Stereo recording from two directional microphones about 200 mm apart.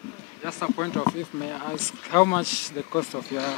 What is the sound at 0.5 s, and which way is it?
Speech, 20° left (ahead or behind).